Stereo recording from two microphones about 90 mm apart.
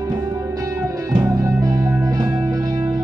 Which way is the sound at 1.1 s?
40° right (ahead or behind).